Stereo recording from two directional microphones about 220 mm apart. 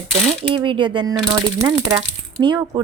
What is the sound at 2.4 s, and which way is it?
Speech, 20° right (ahead or behind).